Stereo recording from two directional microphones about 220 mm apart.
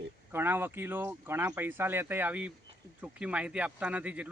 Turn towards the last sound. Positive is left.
turn(degrees=-5)  # may be behind; listen again after turning